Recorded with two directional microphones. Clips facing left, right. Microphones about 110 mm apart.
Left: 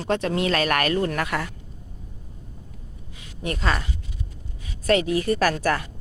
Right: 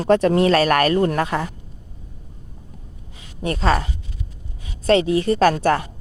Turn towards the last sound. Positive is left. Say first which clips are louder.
# right 6 dB
turn(degrees=-30)  # may be behind; listen again after turning